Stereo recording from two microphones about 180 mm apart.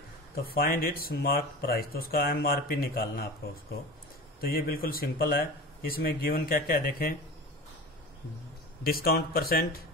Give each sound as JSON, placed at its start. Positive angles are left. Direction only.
{"t": 0.5, "sound": "speech", "side_deg": 55}
{"t": 4.4, "sound": "speech", "side_deg": 55}
{"t": 8.8, "sound": "speech", "side_deg": 55}